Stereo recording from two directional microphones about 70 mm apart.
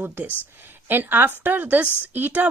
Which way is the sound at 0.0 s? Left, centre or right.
Right.